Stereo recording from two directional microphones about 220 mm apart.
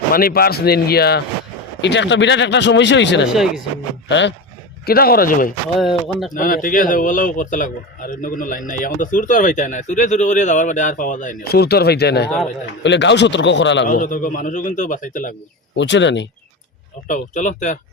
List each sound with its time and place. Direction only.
0.1 s speech: 40° left (ahead or behind)
3.3 s speech: centre (ahead or behind)
4.1 s speech: 55° left (ahead or behind)
4.9 s speech: 45° left (ahead or behind)
5.8 s speech: centre (ahead or behind)
6.3 s a man's voice: 35° left (ahead or behind); by 13.8 s 55° left (ahead or behind)
13.8 s a man's voice: 35° left (ahead or behind)
15.7 s speech: 55° left (ahead or behind)
17.1 s a man's voice: 35° left (ahead or behind)